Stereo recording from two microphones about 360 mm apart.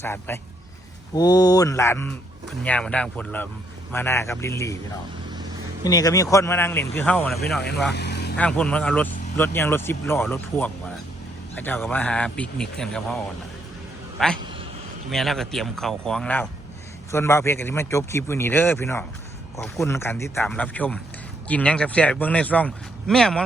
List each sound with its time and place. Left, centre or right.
0.0 s speech: centre
5.8 s speech: centre
7.9 s vehicle: left
8.4 s speech: centre
14.2 s speech: centre